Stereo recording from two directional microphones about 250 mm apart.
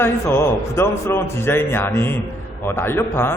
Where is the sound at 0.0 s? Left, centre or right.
Centre.